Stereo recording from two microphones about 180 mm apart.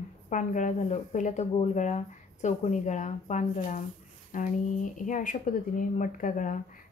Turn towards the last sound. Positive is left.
turn(degrees=45)  # may be behind; listen again after turning